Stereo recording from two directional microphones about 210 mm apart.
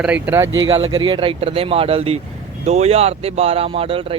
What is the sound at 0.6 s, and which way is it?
Speech, 25° right (ahead or behind).